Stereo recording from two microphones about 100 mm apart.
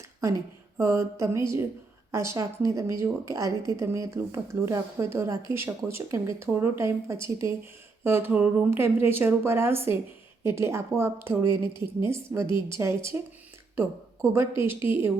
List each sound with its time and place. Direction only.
0.2 s speech: 30° right (ahead or behind)
11.6 s a woman's voice: 50° left (ahead or behind)
11.9 s speech: 25° right (ahead or behind)
14.2 s speech: 25° right (ahead or behind)